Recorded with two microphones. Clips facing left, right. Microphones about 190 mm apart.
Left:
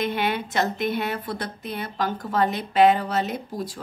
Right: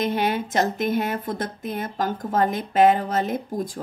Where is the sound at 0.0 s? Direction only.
40° right (ahead or behind).